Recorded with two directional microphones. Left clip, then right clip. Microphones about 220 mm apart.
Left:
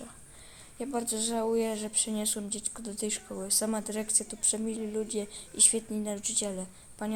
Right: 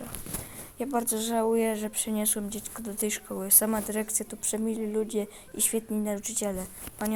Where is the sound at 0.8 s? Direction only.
20° right (ahead or behind).